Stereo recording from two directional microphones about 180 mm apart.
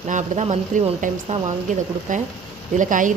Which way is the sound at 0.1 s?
40° right (ahead or behind).